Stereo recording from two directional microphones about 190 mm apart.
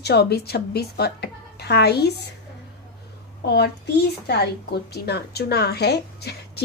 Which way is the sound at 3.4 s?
55° left (ahead or behind).